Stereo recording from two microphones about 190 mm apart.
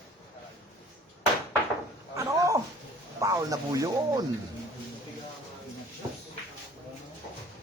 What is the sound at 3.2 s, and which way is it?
Speech, 15° right (ahead or behind).